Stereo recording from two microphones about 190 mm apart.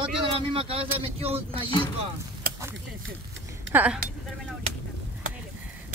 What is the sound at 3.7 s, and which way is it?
Speech, 10° right (ahead or behind).